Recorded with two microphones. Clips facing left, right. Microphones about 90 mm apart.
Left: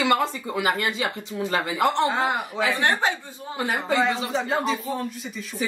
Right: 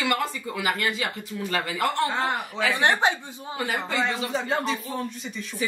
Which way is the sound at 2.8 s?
20° right (ahead or behind).